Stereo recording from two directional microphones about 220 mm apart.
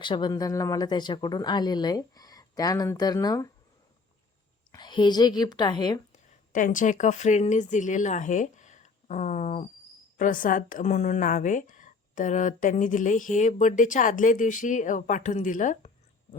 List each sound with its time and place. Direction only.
0.0 s speech: 20° left (ahead or behind)
4.7 s a woman's voice: 20° left (ahead or behind)
6.5 s a woman's voice: 35° left (ahead or behind)